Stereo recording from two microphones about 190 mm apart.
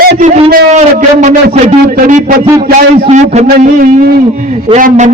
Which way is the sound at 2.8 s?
40° right (ahead or behind).